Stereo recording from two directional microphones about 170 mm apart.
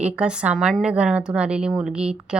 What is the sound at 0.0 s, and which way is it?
A woman's voice, 5° right (ahead or behind).